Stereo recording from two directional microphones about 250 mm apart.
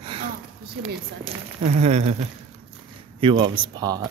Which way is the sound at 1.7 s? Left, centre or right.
Right.